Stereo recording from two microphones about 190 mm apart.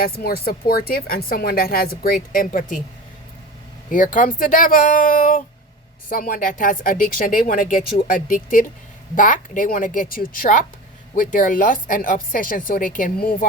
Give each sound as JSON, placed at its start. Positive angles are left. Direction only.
{"t": 0.0, "sound": "speech", "side_deg": 50}
{"t": 3.8, "sound": "speech", "side_deg": 45}